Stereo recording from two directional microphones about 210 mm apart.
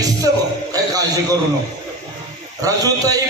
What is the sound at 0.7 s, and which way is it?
Speech, 15° right (ahead or behind).